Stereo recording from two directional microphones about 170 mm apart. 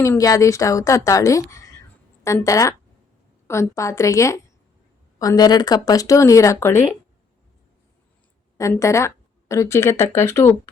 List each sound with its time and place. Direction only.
0.0 s a woman's voice: 20° left (ahead or behind)
8.5 s speech: 20° left (ahead or behind)